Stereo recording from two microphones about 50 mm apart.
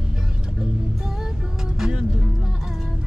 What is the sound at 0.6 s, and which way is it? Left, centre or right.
Music, centre.